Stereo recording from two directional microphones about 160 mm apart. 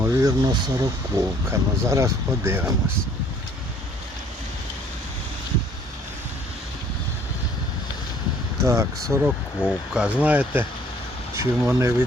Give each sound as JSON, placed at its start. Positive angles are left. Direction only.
{"t": 0.0, "sound": "speech", "side_deg": -20}
{"t": 8.6, "sound": "speech", "side_deg": -15}